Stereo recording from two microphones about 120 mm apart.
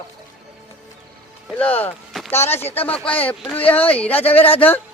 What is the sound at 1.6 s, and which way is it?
Speech, 15° left (ahead or behind).